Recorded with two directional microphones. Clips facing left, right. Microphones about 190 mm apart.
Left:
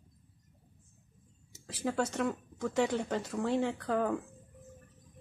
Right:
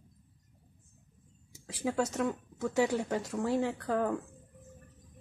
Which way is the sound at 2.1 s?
5° right (ahead or behind).